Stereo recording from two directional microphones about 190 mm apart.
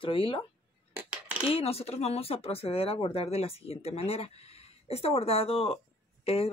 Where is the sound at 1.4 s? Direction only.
30° left (ahead or behind).